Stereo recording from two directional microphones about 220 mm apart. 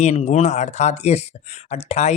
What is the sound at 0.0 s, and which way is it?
Speech, 30° left (ahead or behind).